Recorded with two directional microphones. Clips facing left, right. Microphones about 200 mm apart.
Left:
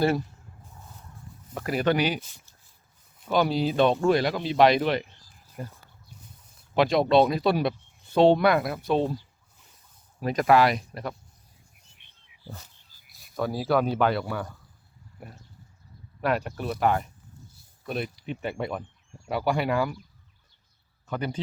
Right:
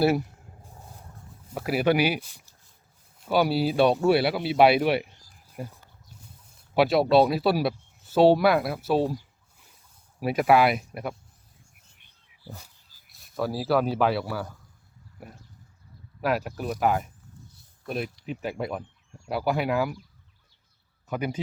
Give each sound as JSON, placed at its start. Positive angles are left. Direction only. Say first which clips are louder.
{"t": 0.0, "sound": "speech", "louder": "right 2 dB", "side_deg": -10}
{"t": 0.6, "sound": "a sound", "louder": "right 2 dB", "side_deg": -35}
{"t": 1.5, "sound": "speech", "louder": "right 2 dB", "side_deg": -10}
{"t": 12.5, "sound": "speech", "louder": "even", "side_deg": -10}
{"t": 13.1, "sound": "speech", "louder": "even", "side_deg": 0}
{"t": 16.2, "sound": "speech", "louder": "even", "side_deg": -5}
{"t": 21.1, "sound": "speech", "louder": "right 1 dB", "side_deg": -10}